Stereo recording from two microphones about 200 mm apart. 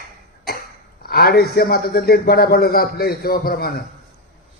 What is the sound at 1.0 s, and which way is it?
Speech, 50° left (ahead or behind).